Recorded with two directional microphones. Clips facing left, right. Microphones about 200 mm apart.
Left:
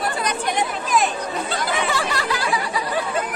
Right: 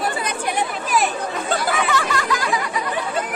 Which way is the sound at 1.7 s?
30° left (ahead or behind).